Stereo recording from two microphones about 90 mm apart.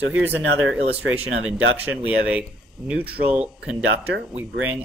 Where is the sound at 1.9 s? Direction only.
15° right (ahead or behind).